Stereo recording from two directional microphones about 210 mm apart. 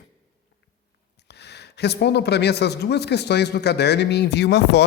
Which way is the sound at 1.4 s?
55° left (ahead or behind).